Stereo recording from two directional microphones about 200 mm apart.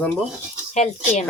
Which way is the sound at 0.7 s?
35° left (ahead or behind).